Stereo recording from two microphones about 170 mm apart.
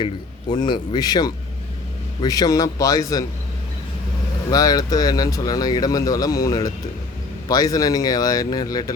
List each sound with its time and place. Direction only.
0.5 s speech: 25° left (ahead or behind)
4.5 s speech: 20° left (ahead or behind)